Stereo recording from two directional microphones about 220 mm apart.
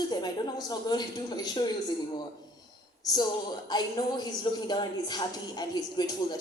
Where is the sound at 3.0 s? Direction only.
15° left (ahead or behind).